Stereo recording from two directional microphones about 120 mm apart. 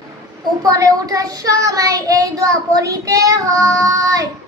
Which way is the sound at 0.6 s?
30° right (ahead or behind).